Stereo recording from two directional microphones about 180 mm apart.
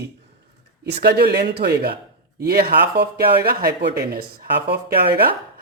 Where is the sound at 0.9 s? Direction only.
65° right (ahead or behind).